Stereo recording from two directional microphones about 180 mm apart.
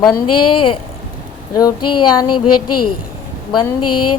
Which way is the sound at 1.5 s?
20° left (ahead or behind).